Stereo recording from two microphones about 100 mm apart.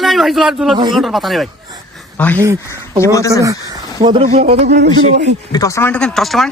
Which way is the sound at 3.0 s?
30° left (ahead or behind).